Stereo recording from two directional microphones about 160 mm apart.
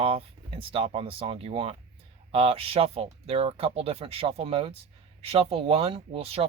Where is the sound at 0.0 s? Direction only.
35° right (ahead or behind).